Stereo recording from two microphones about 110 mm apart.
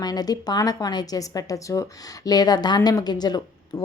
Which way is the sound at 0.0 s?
35° left (ahead or behind).